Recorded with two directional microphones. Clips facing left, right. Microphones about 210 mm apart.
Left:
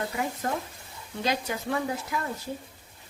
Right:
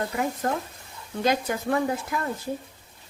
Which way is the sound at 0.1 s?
50° right (ahead or behind).